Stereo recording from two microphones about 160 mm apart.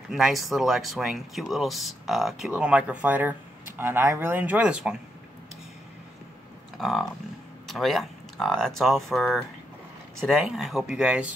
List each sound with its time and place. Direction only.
0.1 s speech: centre (ahead or behind)
6.8 s speech: centre (ahead or behind)